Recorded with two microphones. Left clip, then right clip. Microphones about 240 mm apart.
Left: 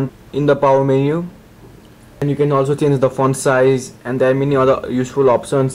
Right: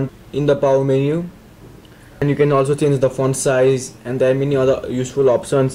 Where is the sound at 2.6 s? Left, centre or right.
Centre.